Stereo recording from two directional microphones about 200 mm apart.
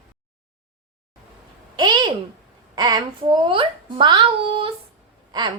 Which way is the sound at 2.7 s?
20° right (ahead or behind).